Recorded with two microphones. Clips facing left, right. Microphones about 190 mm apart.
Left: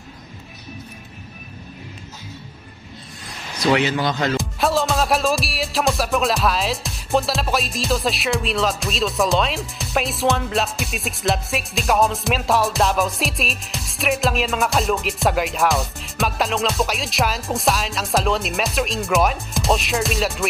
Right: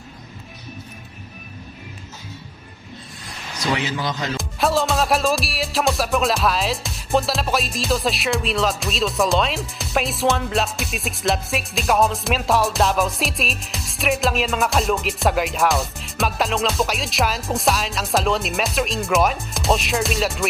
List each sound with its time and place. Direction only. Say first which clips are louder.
3.7 s a man's voice: left 5 dB; 65° left (ahead or behind)
4.4 s music: even; centre (ahead or behind)